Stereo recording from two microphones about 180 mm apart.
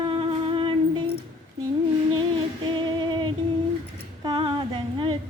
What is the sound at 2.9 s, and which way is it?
Music, 25° right (ahead or behind).